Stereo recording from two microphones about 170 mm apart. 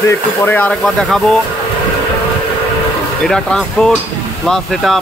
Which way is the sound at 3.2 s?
5° left (ahead or behind).